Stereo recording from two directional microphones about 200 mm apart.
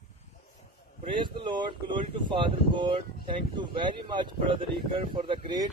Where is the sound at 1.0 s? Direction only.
25° right (ahead or behind).